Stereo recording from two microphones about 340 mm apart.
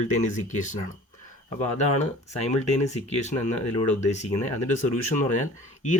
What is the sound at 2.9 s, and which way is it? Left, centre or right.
Speech, centre.